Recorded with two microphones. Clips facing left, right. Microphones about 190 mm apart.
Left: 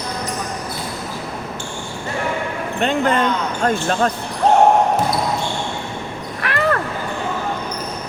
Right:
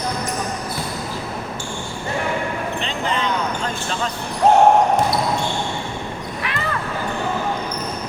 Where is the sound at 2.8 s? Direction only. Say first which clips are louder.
Left 11 dB; 55° left (ahead or behind).